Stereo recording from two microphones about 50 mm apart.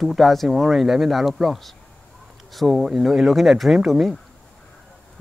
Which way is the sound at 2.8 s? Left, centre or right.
Centre.